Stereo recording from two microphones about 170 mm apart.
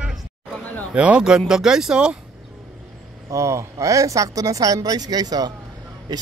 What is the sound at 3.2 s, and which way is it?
Speech, 15° right (ahead or behind).